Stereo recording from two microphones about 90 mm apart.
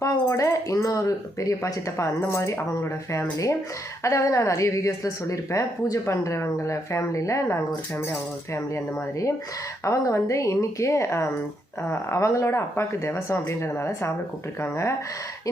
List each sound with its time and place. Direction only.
0.0 s a woman's voice: 35° left (ahead or behind)